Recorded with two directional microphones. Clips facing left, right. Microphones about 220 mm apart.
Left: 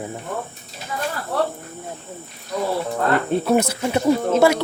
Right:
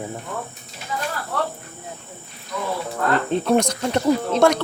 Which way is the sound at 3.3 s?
5° left (ahead or behind).